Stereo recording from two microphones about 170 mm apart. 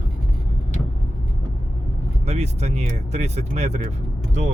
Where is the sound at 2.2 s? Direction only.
40° right (ahead or behind).